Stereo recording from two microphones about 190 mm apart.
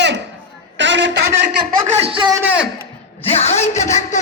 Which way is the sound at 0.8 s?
70° right (ahead or behind).